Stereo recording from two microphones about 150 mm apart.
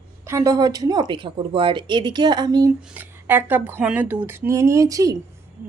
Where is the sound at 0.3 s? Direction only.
20° right (ahead or behind).